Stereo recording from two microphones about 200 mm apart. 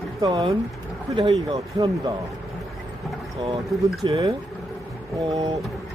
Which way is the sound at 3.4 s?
25° right (ahead or behind).